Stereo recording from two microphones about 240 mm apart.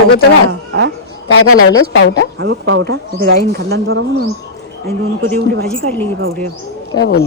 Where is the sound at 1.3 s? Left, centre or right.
Left.